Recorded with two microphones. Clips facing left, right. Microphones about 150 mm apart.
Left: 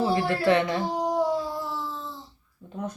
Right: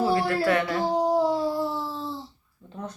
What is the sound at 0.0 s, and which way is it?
Speech, 20° left (ahead or behind).